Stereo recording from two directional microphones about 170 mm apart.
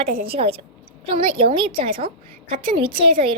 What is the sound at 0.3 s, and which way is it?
A woman's voice, 35° right (ahead or behind).